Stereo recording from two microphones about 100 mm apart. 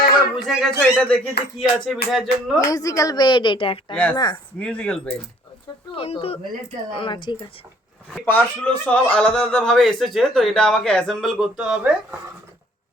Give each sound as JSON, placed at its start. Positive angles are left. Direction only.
{"t": 0.3, "sound": "speech", "side_deg": 0}
{"t": 1.5, "sound": "speech", "side_deg": 0}
{"t": 2.6, "sound": "speech", "side_deg": 35}
{"t": 3.2, "sound": "a woman's voice", "side_deg": 50}
{"t": 4.6, "sound": "a man's voice", "side_deg": 10}
{"t": 5.9, "sound": "speech", "side_deg": 65}
{"t": 6.9, "sound": "a woman's voice", "side_deg": 55}
{"t": 8.2, "sound": "a man's voice", "side_deg": 15}
{"t": 11.5, "sound": "speech", "side_deg": -10}